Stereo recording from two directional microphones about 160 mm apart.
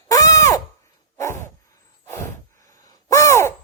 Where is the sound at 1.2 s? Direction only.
15° left (ahead or behind).